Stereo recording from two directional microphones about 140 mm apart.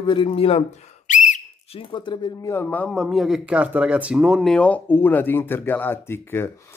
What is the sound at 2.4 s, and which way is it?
Speech, 15° left (ahead or behind).